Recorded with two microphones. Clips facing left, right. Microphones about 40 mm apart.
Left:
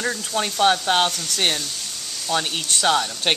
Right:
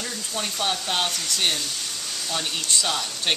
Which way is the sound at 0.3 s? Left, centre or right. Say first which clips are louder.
Left 8 dB; left.